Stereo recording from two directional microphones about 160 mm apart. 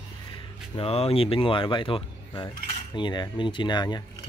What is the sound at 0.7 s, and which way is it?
Speech, 40° left (ahead or behind).